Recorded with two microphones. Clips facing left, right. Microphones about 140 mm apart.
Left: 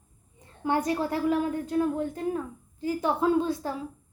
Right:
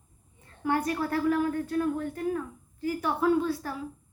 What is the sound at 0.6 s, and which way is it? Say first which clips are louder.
A woman's voice: left 2 dB; 20° left (ahead or behind).